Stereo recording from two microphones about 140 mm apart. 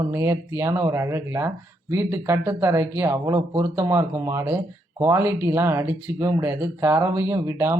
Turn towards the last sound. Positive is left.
turn(degrees=-20)  # may be behind; listen again after turning